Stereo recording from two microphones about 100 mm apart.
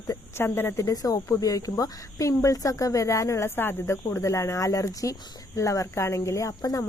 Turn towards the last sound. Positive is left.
turn(degrees=35)  # may be behind; listen again after turning